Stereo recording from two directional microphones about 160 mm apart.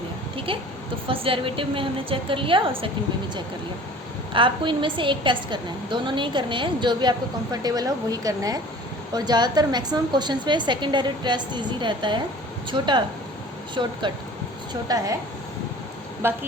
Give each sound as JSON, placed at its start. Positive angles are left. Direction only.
{"t": 0.3, "sound": "a sound", "side_deg": -35}
{"t": 1.0, "sound": "a woman's voice", "side_deg": -35}
{"t": 4.4, "sound": "a woman's voice", "side_deg": -30}
{"t": 16.2, "sound": "speech", "side_deg": -15}